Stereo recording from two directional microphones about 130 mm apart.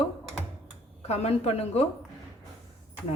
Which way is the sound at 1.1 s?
55° left (ahead or behind).